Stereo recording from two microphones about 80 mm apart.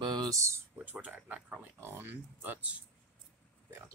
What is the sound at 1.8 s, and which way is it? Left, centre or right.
Speech, right.